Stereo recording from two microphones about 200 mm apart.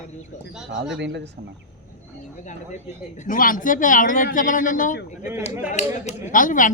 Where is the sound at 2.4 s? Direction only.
35° left (ahead or behind).